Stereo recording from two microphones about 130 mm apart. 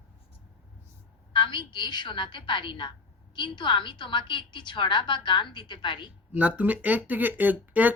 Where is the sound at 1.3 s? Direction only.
40° left (ahead or behind).